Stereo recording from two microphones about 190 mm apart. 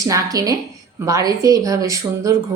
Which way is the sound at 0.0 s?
20° right (ahead or behind).